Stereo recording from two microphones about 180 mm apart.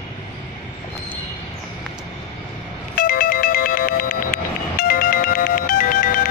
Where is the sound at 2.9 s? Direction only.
50° left (ahead or behind).